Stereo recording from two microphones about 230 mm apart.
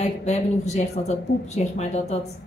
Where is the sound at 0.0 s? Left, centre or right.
Left.